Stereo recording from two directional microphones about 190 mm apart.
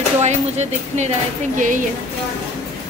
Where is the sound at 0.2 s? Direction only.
35° right (ahead or behind).